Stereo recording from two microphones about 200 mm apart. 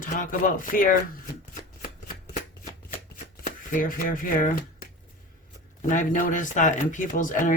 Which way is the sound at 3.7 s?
45° left (ahead or behind).